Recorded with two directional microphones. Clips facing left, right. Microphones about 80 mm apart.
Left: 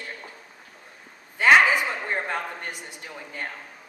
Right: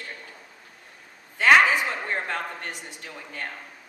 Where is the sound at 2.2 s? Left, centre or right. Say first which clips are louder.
Left 1 dB; centre.